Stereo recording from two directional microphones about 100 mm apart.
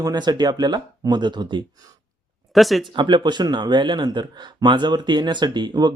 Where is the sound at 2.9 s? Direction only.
50° right (ahead or behind).